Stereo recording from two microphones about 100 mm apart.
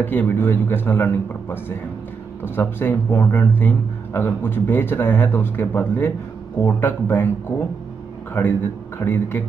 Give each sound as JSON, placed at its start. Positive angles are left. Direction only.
{"t": 0.0, "sound": "a man's voice", "side_deg": 20}
{"t": 8.4, "sound": "a man's voice", "side_deg": 20}